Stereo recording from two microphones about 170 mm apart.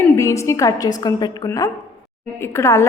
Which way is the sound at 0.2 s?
15° left (ahead or behind).